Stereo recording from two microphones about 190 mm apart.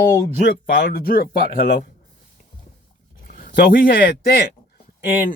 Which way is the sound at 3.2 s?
50° left (ahead or behind).